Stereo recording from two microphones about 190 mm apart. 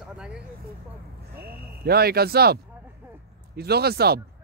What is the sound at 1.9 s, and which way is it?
Speech, 55° right (ahead or behind).